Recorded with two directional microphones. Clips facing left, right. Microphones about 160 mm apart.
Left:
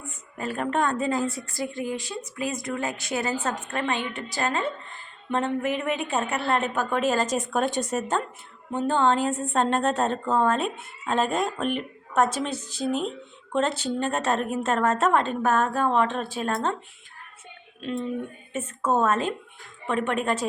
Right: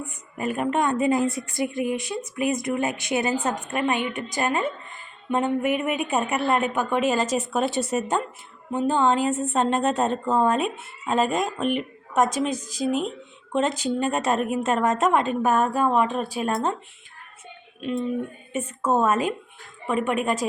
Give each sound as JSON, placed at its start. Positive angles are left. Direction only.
{"t": 0.3, "sound": "a woman's voice", "side_deg": -15}
{"t": 18.5, "sound": "a woman's voice", "side_deg": -10}